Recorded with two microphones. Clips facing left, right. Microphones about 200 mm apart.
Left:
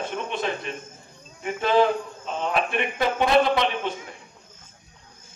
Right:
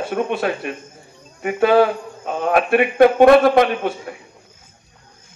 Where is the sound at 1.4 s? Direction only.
65° right (ahead or behind).